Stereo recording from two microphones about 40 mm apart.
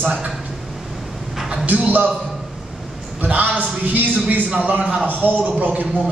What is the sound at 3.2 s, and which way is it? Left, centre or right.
Speech, right.